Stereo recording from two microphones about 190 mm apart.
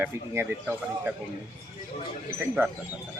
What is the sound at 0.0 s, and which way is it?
Speech, 10° right (ahead or behind).